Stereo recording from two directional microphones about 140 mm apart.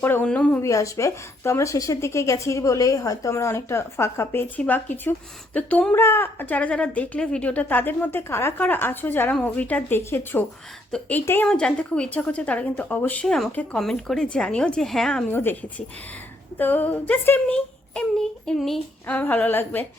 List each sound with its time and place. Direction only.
0.0 s a woman's voice: 15° left (ahead or behind)
0.6 s a woman's voice: 20° left (ahead or behind); by 15.2 s 5° left (ahead or behind)
15.3 s a woman's voice: 15° left (ahead or behind)
16.6 s a woman's voice: 15° left (ahead or behind)